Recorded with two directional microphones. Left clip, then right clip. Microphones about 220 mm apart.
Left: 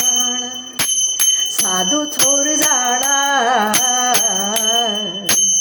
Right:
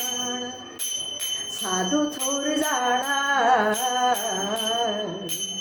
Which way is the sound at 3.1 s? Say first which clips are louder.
Left 5 dB; 50° left (ahead or behind).